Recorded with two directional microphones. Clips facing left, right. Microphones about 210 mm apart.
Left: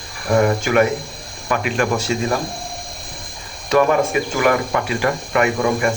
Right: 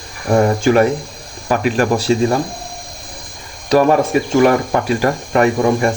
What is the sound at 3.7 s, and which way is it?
Speech, 35° right (ahead or behind).